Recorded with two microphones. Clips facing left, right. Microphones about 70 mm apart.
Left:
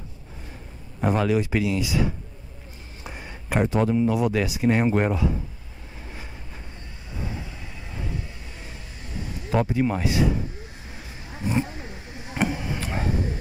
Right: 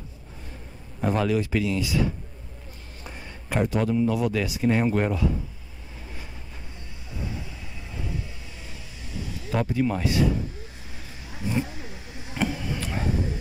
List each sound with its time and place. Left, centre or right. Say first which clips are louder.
1.0 s a man's voice: left 2 dB; centre
9.5 s speech: left 2 dB; left
11.4 s roaring cats: left 2 dB; left